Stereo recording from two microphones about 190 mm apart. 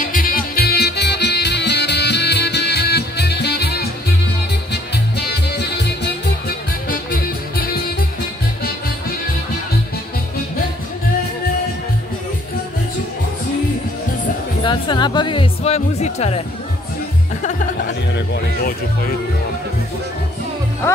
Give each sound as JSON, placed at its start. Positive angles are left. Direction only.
{"t": 0.0, "sound": "music", "side_deg": 45}
{"t": 4.9, "sound": "music", "side_deg": 60}
{"t": 6.9, "sound": "music", "side_deg": 50}
{"t": 14.6, "sound": "music", "side_deg": 25}
{"t": 18.1, "sound": "speech", "side_deg": 60}